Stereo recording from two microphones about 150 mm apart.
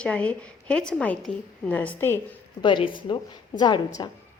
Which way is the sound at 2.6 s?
35° left (ahead or behind).